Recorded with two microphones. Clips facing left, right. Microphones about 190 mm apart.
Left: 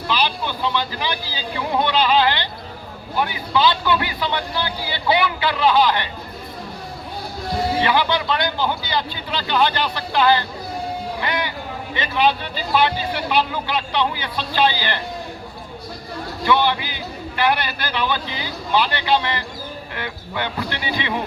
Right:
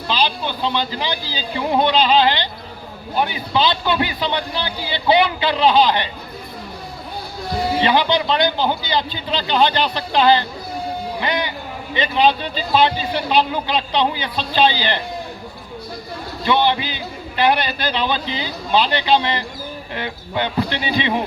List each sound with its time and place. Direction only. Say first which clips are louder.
0.1 s a man's voice: right 2 dB; 25° right (ahead or behind)
7.8 s a man's voice: right 4 dB; 20° right (ahead or behind)
11.2 s a sound: right 3 dB; 20° right (ahead or behind)
12.0 s a man's voice: right 2 dB; 25° right (ahead or behind)
16.4 s a man's voice: right 1 dB; 25° right (ahead or behind)